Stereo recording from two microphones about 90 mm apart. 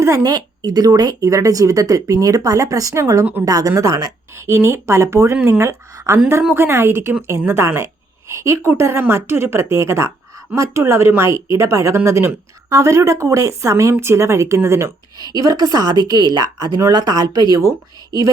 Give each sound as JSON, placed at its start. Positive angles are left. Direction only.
{"t": 0.0, "sound": "a woman's voice", "side_deg": -40}
{"t": 15.3, "sound": "a woman's voice", "side_deg": -40}